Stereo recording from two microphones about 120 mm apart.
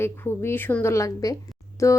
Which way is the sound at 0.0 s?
20° left (ahead or behind).